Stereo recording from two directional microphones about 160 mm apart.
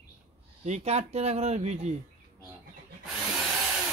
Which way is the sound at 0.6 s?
45° right (ahead or behind).